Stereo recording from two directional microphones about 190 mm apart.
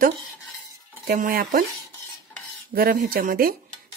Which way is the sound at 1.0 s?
50° right (ahead or behind).